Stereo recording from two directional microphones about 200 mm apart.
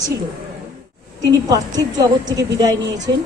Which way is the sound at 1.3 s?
20° right (ahead or behind).